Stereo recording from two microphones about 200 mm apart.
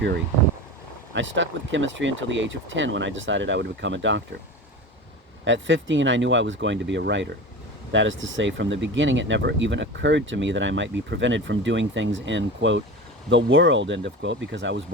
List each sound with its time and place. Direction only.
1.1 s speech: 70° right (ahead or behind)
5.5 s speech: 65° right (ahead or behind)